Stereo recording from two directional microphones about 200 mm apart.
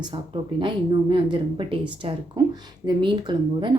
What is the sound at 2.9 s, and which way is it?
Speech, 25° right (ahead or behind).